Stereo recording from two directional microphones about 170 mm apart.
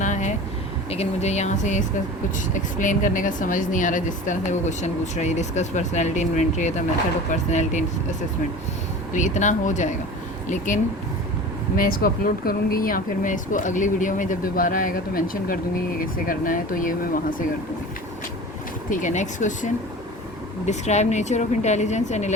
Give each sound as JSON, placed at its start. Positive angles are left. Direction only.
{"t": 0.0, "sound": "a sound", "side_deg": 45}
{"t": 0.9, "sound": "a woman's voice", "side_deg": 40}
{"t": 9.1, "sound": "a woman's voice", "side_deg": 45}
{"t": 18.9, "sound": "a woman's voice", "side_deg": 50}